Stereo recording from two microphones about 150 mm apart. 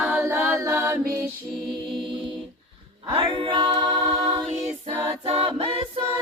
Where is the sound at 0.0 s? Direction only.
10° right (ahead or behind).